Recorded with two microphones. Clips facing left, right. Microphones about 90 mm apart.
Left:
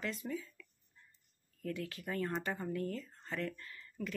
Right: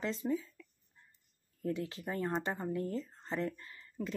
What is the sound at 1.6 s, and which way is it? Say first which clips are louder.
Speech: right 4 dB; 25° right (ahead or behind).